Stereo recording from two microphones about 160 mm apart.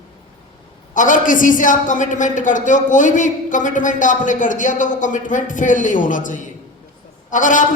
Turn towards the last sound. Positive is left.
turn(degrees=55)  # may be behind; listen again after turning